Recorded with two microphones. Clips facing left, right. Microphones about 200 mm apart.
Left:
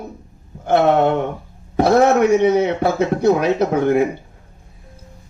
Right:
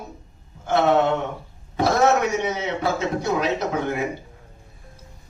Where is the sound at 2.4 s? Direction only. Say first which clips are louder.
Left 10 dB; 55° left (ahead or behind).